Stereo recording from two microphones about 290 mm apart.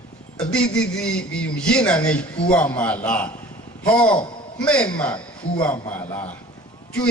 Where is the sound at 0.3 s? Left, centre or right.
Centre.